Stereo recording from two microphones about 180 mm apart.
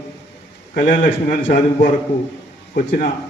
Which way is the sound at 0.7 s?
50° left (ahead or behind).